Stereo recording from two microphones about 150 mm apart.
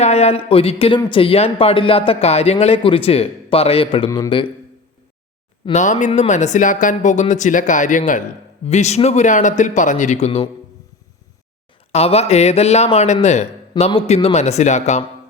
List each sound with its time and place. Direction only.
0.0 s speech: 45° left (ahead or behind)
5.7 s speech: 55° left (ahead or behind)
11.9 s speech: 45° left (ahead or behind)